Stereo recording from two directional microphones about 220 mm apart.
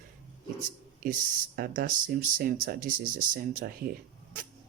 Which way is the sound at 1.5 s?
40° right (ahead or behind).